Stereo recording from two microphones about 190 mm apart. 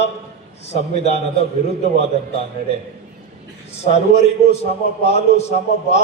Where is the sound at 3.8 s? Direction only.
35° left (ahead or behind).